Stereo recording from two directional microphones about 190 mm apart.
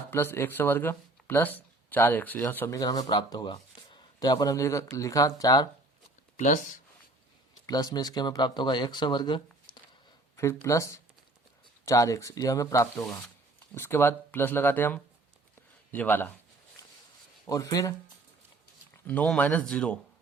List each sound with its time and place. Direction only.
0.1 s speech: 10° left (ahead or behind)
6.3 s speech: 40° left (ahead or behind)
7.7 s speech: 20° left (ahead or behind)
17.4 s speech: 15° left (ahead or behind)
19.0 s speech: 5° left (ahead or behind)